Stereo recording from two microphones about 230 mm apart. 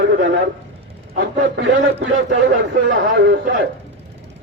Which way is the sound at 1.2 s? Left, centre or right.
Right.